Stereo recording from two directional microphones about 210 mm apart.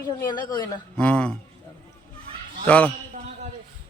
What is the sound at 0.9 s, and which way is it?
Speech, 5° left (ahead or behind).